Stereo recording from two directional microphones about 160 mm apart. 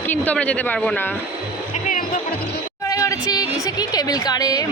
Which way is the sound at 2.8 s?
20° left (ahead or behind).